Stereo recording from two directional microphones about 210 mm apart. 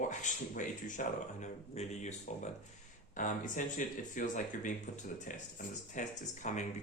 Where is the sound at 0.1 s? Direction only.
35° left (ahead or behind).